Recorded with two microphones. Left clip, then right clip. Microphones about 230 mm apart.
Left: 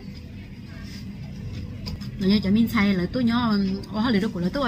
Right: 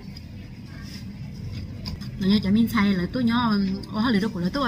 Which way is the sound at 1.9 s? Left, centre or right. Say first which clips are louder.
Left 1 dB; centre.